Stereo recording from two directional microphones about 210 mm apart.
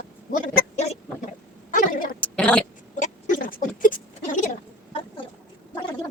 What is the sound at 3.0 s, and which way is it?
Rodents, 40° left (ahead or behind).